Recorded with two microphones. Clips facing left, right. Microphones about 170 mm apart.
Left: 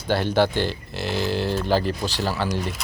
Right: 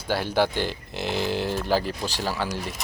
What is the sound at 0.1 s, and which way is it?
Speech, 10° right (ahead or behind).